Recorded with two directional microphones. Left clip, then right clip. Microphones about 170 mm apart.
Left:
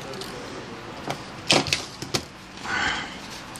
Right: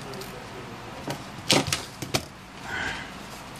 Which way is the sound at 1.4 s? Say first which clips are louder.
Left 2 dB; 15° right (ahead or behind).